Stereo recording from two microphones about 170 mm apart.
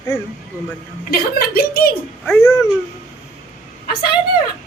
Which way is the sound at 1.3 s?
65° left (ahead or behind).